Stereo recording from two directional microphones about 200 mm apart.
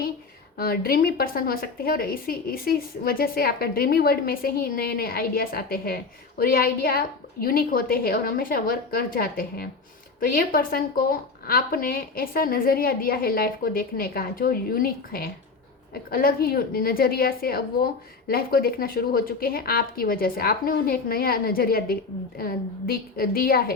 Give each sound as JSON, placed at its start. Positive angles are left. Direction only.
{"t": 0.5, "sound": "a woman's voice", "side_deg": 50}